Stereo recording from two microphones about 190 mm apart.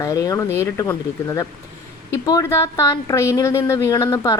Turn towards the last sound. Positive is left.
turn(degrees=15)  # may be behind; listen again after turning